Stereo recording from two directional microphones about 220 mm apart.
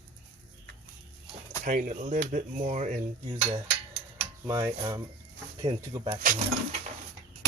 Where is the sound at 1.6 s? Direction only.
35° right (ahead or behind).